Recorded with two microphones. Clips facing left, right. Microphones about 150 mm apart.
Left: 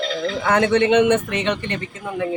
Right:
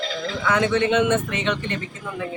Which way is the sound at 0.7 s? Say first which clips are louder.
Left 5 dB; 70° left (ahead or behind).